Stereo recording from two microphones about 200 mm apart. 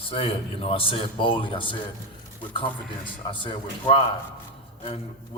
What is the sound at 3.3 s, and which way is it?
Speech, 25° left (ahead or behind).